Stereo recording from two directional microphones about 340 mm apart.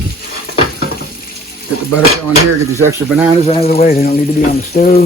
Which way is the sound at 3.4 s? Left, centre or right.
Centre.